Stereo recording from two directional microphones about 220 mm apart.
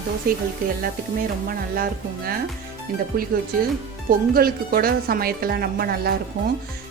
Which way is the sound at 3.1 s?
40° right (ahead or behind).